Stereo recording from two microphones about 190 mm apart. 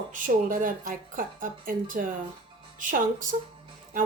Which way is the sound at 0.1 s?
45° right (ahead or behind).